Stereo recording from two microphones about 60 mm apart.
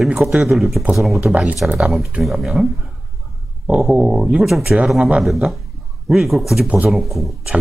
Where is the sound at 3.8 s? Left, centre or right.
Centre.